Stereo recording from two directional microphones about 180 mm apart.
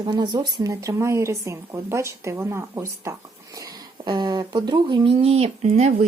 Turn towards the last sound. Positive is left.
turn(degrees=-35)  # may be behind; listen again after turning